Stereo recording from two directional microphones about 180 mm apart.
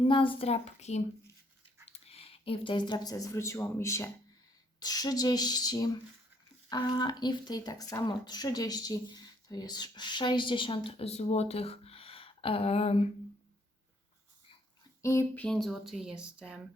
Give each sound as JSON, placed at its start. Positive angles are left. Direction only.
{"t": 0.3, "sound": "a woman's voice", "side_deg": 35}
{"t": 15.0, "sound": "a sound", "side_deg": 15}
{"t": 15.4, "sound": "speech", "side_deg": 0}